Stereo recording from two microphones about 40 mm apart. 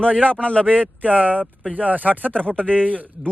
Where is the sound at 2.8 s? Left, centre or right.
Right.